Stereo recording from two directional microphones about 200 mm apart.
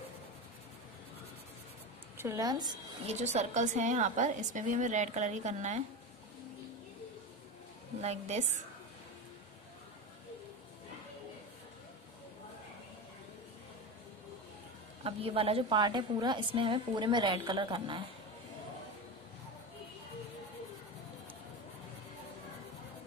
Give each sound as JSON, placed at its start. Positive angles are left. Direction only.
{"t": 2.1, "sound": "a woman's voice", "side_deg": -15}
{"t": 3.1, "sound": "a woman's voice", "side_deg": -35}
{"t": 8.0, "sound": "a woman's voice", "side_deg": -35}
{"t": 15.0, "sound": "a woman's voice", "side_deg": -30}